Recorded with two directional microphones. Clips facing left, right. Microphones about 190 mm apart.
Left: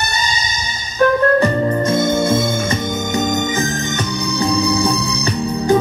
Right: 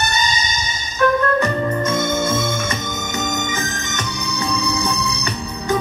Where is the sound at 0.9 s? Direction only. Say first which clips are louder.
Left 4 dB; 35° left (ahead or behind).